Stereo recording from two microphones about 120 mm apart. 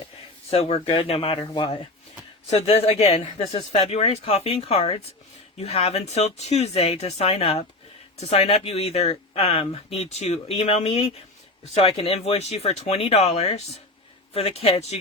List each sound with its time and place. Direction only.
0.5 s speech: 60° left (ahead or behind); by 1.8 s 40° left (ahead or behind)
2.5 s speech: 60° left (ahead or behind)